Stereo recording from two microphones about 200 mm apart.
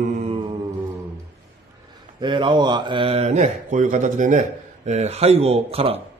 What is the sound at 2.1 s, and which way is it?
Speech, 25° right (ahead or behind).